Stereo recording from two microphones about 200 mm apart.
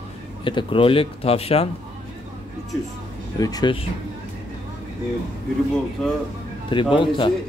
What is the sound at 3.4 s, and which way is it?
Speech, 20° left (ahead or behind).